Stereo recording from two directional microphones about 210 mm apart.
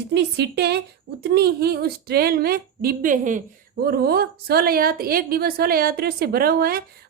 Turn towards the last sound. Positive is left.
turn(degrees=-45)  # may be behind; listen again after turning